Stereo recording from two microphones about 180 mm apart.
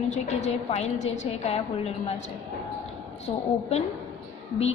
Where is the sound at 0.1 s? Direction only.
40° left (ahead or behind).